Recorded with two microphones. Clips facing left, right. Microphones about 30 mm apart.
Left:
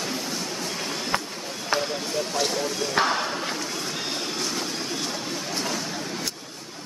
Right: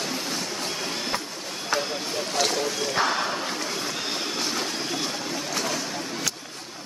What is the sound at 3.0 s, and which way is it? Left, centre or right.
Speech, left.